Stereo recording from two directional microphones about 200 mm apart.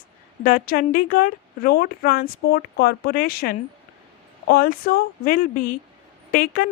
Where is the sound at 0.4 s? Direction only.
45° left (ahead or behind).